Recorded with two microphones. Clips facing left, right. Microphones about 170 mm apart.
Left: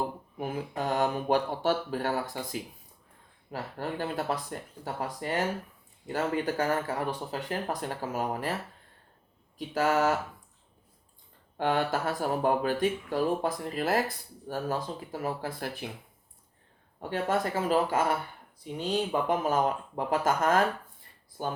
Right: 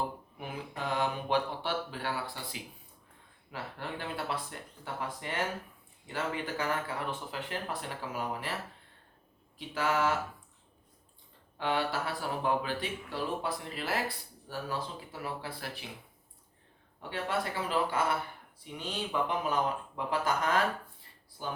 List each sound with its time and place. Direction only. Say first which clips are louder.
0.3 s speech: left 9 dB; 45° left (ahead or behind)
9.6 s speech: left 5 dB; 45° left (ahead or behind)
11.5 s speech: left 4 dB; 50° left (ahead or behind)
17.0 s speech: left 5 dB; 45° left (ahead or behind)